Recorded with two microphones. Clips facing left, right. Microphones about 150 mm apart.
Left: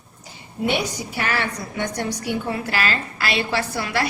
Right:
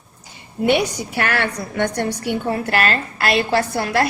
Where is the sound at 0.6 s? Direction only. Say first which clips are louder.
Right 5 dB; 65° right (ahead or behind).